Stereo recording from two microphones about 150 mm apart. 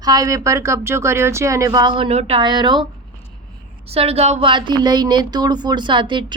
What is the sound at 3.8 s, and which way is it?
A woman's voice, 40° right (ahead or behind).